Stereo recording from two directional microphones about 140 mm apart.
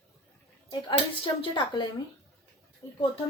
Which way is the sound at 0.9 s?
35° left (ahead or behind).